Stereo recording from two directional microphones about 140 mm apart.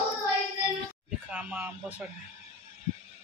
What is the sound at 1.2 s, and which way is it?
Speech, 10° right (ahead or behind).